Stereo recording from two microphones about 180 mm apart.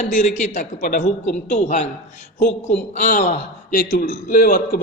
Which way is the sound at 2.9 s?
45° left (ahead or behind).